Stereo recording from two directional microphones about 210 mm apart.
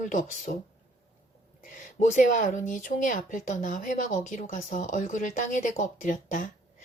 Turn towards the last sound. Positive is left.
turn(degrees=40)  # may be behind; listen again after turning